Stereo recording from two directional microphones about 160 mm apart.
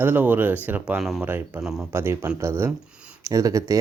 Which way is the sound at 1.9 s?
15° right (ahead or behind).